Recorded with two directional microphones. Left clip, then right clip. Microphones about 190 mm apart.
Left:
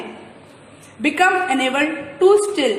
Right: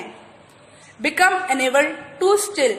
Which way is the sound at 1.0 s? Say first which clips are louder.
Left 1 dB; 30° right (ahead or behind).